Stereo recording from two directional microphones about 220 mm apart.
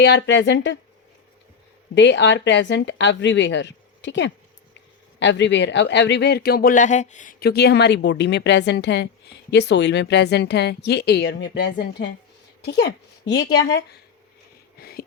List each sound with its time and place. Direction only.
0.0 s speech: 50° left (ahead or behind)
2.0 s speech: 55° left (ahead or behind)
14.8 s a sound: 45° left (ahead or behind)